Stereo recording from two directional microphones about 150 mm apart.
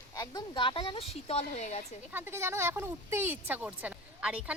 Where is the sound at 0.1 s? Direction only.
25° left (ahead or behind); by 1.8 s 45° left (ahead or behind).